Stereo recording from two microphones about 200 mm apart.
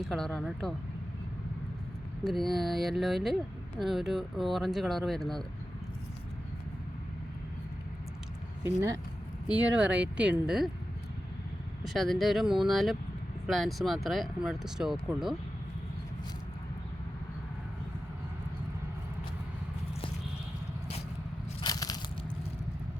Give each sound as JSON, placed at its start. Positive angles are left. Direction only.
{"t": 0.0, "sound": "speech", "side_deg": 0}
{"t": 2.2, "sound": "speech", "side_deg": 0}
{"t": 9.5, "sound": "speech", "side_deg": -5}
{"t": 11.9, "sound": "speech", "side_deg": 0}
{"t": 21.6, "sound": "biting", "side_deg": 20}